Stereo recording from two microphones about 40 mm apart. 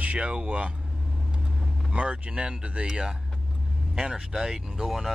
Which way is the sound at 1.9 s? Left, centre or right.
Right.